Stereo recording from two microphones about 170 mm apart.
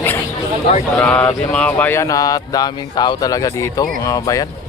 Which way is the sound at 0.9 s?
5° left (ahead or behind).